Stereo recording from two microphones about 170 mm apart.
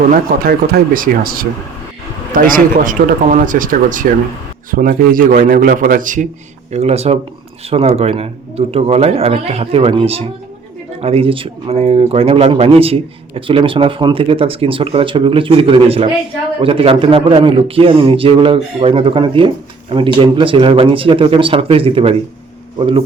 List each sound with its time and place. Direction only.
0.1 s speech: 55° right (ahead or behind)
6.7 s speech: 40° right (ahead or behind)